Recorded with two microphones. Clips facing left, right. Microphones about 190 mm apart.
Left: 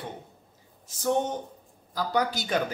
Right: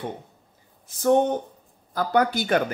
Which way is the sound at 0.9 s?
60° right (ahead or behind).